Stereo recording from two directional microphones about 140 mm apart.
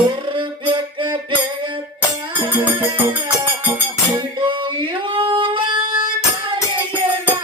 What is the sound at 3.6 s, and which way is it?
Music, 15° right (ahead or behind).